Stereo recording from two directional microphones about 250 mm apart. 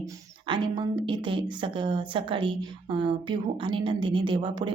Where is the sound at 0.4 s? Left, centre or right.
Centre.